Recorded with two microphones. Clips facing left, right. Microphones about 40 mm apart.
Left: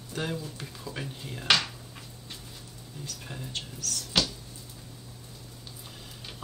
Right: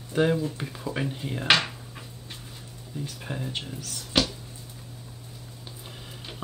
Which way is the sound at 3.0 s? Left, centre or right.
Right.